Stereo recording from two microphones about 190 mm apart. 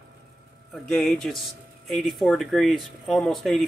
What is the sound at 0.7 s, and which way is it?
Speech, centre (ahead or behind).